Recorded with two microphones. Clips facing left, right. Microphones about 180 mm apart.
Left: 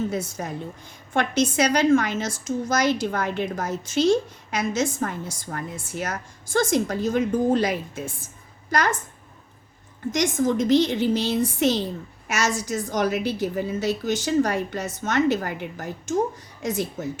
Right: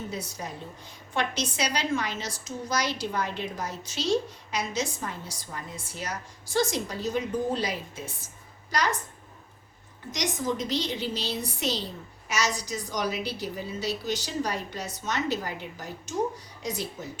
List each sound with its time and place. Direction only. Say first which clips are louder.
0.1 s a woman's voice: left 7 dB; 50° left (ahead or behind)
10.1 s a woman's voice: left 8 dB; 50° left (ahead or behind)